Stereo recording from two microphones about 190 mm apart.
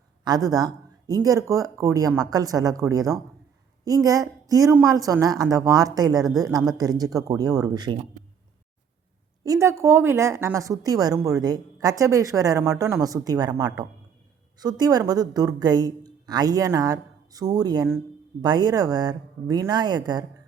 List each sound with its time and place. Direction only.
0.3 s a woman's voice: 20° right (ahead or behind)
9.4 s a woman's voice: 15° right (ahead or behind)